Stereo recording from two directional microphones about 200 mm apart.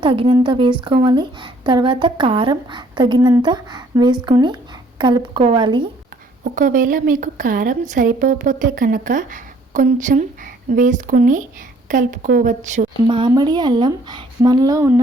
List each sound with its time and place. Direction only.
0.0 s a woman's voice: 25° right (ahead or behind)
6.4 s a woman's voice: 45° right (ahead or behind)
13.1 s a woman's voice: 25° right (ahead or behind)